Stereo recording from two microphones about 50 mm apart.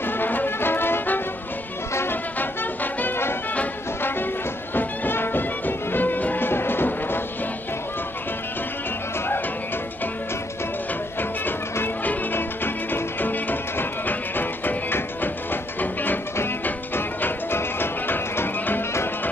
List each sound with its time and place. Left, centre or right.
0.0 s music: left
2.3 s brass instrument: left
4.7 s music: left
12.0 s music: left
12.4 s music: left